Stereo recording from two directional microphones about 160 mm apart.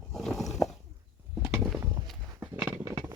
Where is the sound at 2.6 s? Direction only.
10° right (ahead or behind).